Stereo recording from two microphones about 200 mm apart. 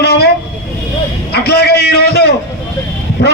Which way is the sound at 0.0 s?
55° left (ahead or behind).